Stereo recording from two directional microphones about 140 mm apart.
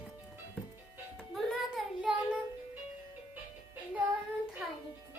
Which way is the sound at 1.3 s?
5° right (ahead or behind).